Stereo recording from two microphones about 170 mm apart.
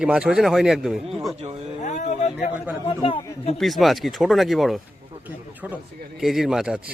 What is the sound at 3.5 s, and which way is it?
A man's voice, centre (ahead or behind).